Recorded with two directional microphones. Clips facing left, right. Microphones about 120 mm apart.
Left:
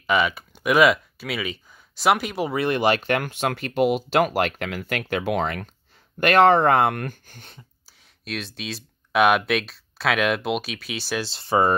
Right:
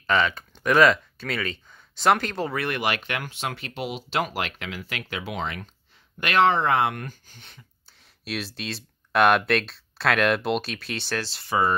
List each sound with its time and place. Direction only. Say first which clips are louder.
0.0 s speech: left 1 dB; 10° left (ahead or behind); by 7.5 s 50° left (ahead or behind)
8.2 s speech: even; centre (ahead or behind)
11.1 s speech: left 5 dB; 25° left (ahead or behind)